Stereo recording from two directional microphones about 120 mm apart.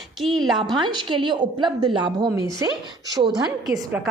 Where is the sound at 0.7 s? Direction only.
40° right (ahead or behind).